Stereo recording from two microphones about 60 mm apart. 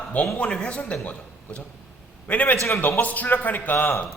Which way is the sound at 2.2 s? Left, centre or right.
Left.